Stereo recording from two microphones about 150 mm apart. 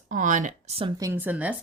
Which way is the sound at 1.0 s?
15° right (ahead or behind).